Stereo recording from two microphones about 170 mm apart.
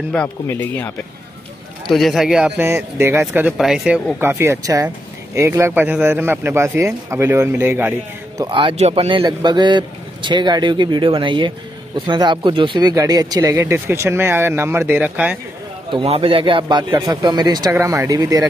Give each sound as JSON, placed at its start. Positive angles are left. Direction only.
{"t": 0.1, "sound": "speech", "side_deg": 10}
{"t": 1.9, "sound": "speech", "side_deg": 0}
{"t": 3.5, "sound": "speech", "side_deg": 0}
{"t": 8.5, "sound": "a man's voice", "side_deg": -30}
{"t": 15.9, "sound": "a man's voice", "side_deg": -35}